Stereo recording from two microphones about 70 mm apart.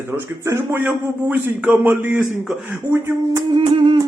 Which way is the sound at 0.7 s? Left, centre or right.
Right.